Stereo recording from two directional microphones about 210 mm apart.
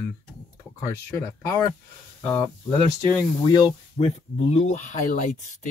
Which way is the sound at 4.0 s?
50° left (ahead or behind).